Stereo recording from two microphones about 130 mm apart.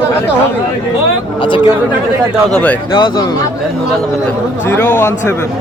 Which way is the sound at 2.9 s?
35° left (ahead or behind).